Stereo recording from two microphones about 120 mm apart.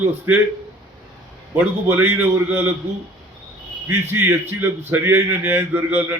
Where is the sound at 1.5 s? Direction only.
15° right (ahead or behind).